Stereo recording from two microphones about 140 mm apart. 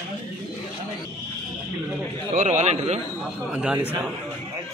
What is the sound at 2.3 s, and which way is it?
Speech, 55° right (ahead or behind).